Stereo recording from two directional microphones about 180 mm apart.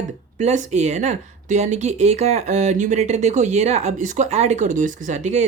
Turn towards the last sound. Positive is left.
turn(degrees=-40)  # may be behind; listen again after turning